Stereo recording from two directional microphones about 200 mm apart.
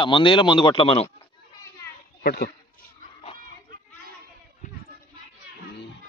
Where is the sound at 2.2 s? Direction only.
50° left (ahead or behind).